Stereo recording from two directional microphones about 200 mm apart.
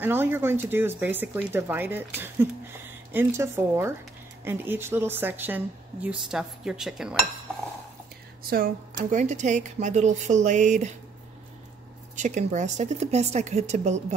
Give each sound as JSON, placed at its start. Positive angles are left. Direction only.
{"t": 0.0, "sound": "speech", "side_deg": -10}
{"t": 6.0, "sound": "dishes", "side_deg": -5}
{"t": 8.5, "sound": "a woman's voice", "side_deg": -50}
{"t": 12.2, "sound": "a woman's voice", "side_deg": -35}